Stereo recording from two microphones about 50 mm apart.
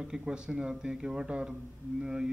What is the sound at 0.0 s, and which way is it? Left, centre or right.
Speech, centre.